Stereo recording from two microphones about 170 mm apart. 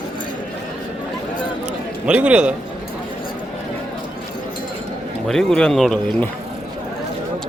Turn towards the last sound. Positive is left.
turn(degrees=5)  # may be behind; listen again after turning